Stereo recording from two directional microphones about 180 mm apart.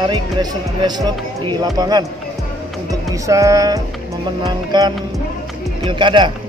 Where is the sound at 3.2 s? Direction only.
20° right (ahead or behind).